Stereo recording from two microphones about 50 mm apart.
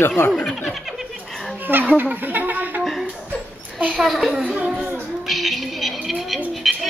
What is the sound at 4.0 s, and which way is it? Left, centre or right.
Speech, centre.